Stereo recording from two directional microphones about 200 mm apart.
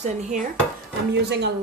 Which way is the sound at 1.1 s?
55° right (ahead or behind).